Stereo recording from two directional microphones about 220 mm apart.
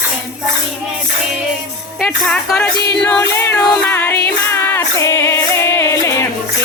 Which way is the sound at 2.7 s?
50° left (ahead or behind).